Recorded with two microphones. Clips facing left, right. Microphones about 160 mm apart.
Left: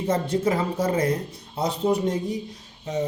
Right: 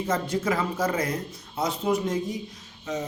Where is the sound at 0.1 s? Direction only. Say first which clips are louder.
Left 4 dB; 30° left (ahead or behind).